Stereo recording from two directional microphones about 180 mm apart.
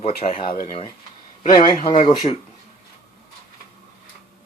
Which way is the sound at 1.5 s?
30° left (ahead or behind).